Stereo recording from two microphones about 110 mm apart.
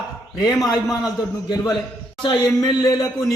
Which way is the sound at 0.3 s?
25° left (ahead or behind).